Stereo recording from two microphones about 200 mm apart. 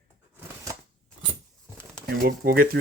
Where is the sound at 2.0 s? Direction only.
45° right (ahead or behind).